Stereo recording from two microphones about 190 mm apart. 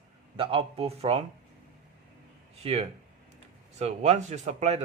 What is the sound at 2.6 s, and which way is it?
Speech, 30° right (ahead or behind).